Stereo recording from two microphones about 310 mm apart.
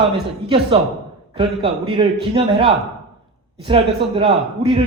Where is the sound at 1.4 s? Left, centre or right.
Centre.